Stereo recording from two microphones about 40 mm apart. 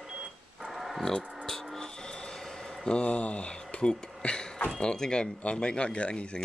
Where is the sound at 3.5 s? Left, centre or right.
Left.